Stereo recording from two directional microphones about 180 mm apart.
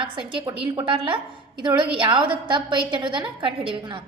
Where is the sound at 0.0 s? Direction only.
25° right (ahead or behind).